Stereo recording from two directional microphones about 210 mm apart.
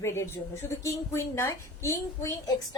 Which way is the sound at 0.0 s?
10° left (ahead or behind).